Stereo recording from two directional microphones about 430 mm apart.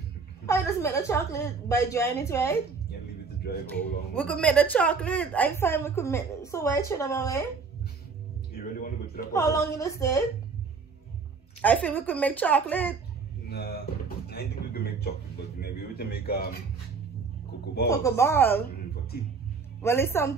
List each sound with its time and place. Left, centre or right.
0.5 s a woman's voice: centre
3.6 s a woman's voice: centre
8.5 s speech: centre
9.3 s a woman's voice: centre
11.6 s a woman's voice: centre
13.5 s a sound: left
17.8 s a woman's voice: centre
19.8 s a woman's voice: centre